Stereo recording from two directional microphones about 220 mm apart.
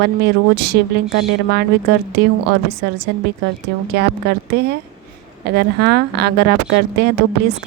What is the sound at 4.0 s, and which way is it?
Speech, 50° right (ahead or behind).